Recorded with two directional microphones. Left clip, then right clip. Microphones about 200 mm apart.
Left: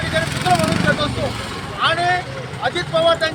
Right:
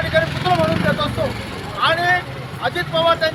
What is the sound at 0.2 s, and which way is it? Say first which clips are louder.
Vehicle: even; 60° left (ahead or behind).